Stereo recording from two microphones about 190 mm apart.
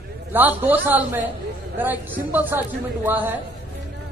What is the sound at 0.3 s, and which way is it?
A man's voice, 10° right (ahead or behind).